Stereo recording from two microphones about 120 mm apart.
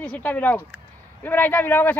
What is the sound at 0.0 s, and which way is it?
Speech, 10° left (ahead or behind).